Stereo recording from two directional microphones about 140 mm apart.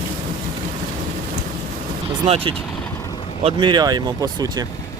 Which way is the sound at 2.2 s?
45° right (ahead or behind).